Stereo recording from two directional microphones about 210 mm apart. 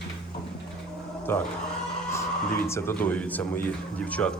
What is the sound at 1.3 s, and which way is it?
Speech, 10° left (ahead or behind).